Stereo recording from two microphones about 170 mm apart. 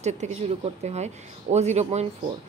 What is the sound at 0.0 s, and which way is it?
A woman's voice, 40° right (ahead or behind).